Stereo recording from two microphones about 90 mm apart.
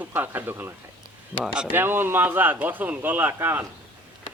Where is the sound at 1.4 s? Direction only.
10° right (ahead or behind).